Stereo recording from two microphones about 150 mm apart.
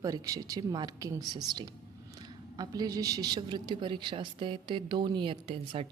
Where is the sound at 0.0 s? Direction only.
20° right (ahead or behind).